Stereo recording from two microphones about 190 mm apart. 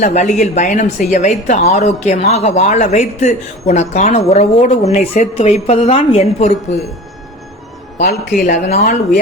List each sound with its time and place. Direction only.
0.0 s a woman's voice: 35° left (ahead or behind)
8.0 s a woman's voice: 45° left (ahead or behind)